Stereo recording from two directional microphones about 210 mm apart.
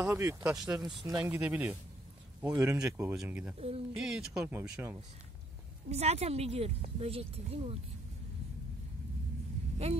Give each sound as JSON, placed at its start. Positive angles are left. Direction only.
{"t": 0.0, "sound": "speech", "side_deg": -15}
{"t": 3.5, "sound": "speech", "side_deg": -30}
{"t": 3.9, "sound": "speech", "side_deg": -5}
{"t": 5.9, "sound": "speech", "side_deg": -30}